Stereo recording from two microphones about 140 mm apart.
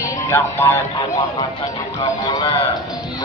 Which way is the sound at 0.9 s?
30° left (ahead or behind).